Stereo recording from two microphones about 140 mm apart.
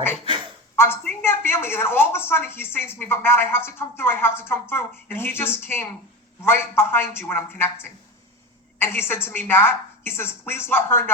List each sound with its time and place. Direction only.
0.8 s speech: 15° left (ahead or behind)